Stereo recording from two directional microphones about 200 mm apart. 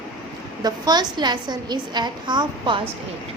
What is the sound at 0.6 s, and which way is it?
A woman's voice, 20° right (ahead or behind).